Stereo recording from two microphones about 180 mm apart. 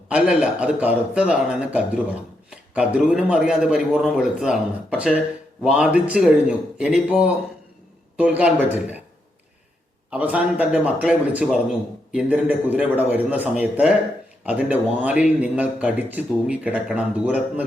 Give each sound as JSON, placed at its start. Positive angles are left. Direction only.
{"t": 0.1, "sound": "a man's voice", "side_deg": -5}
{"t": 10.1, "sound": "a man's voice", "side_deg": -5}